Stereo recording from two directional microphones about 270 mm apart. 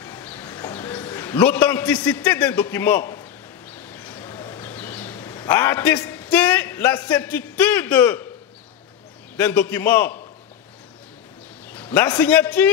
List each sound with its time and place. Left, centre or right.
0.0 s a man's voice: centre
3.7 s a sound: centre
9.4 s a man's voice: centre
11.7 s a man's voice: centre